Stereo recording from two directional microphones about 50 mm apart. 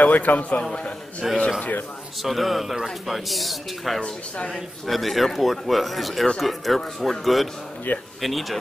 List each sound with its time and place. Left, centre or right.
0.0 s a man's voice: left
1.2 s speech: centre
7.9 s a man's voice: left
8.2 s speech: centre